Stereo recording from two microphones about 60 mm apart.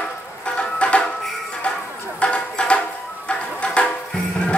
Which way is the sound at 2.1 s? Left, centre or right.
Left.